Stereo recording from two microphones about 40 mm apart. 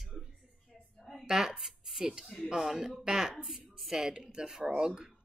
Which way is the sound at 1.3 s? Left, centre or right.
Centre.